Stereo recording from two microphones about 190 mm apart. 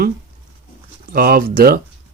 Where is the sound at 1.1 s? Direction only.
50° right (ahead or behind).